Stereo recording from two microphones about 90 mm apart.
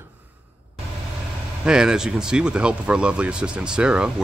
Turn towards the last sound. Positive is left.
turn(degrees=-10)  # may be behind; listen again after turning